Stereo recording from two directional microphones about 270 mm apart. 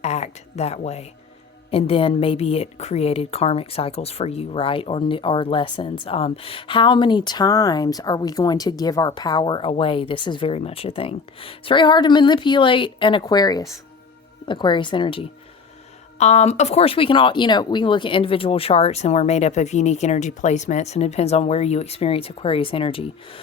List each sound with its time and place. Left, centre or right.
0.0 s a woman's voice: left